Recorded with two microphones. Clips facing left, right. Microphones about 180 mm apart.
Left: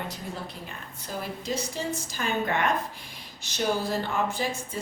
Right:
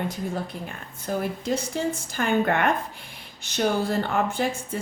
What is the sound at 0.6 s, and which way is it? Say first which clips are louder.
A woman's voice: right 7 dB; 55° right (ahead or behind).